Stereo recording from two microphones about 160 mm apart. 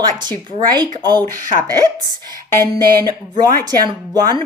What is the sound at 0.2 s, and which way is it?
Speech, 30° right (ahead or behind).